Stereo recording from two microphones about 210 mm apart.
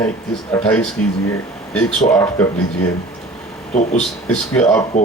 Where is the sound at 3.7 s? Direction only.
35° left (ahead or behind).